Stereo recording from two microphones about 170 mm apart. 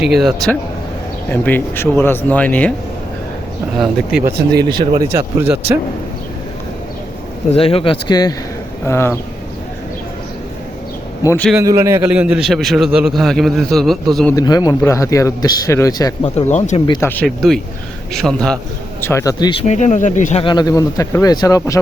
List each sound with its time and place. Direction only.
0.1 s a man's voice: centre (ahead or behind)
1.3 s speech: 10° left (ahead or behind)
4.7 s speech: 25° right (ahead or behind)
5.0 s speech: 15° right (ahead or behind)
7.5 s speech: 35° left (ahead or behind); by 9.1 s 15° left (ahead or behind)
11.3 s speech: 10° left (ahead or behind)
11.5 s a man's voice: 20° right (ahead or behind); by 14.3 s centre (ahead or behind)
14.3 s a man's voice: 20° left (ahead or behind)
16.2 s speech: 40° left (ahead or behind)
17.0 s speech: 10° left (ahead or behind)
17.2 s a man's voice: centre (ahead or behind)
19.0 s a man's voice: 20° left (ahead or behind)
19.6 s speech: 45° left (ahead or behind)
20.4 s a man's voice: 25° left (ahead or behind)